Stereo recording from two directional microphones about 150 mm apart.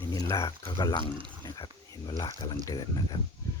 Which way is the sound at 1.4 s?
30° left (ahead or behind).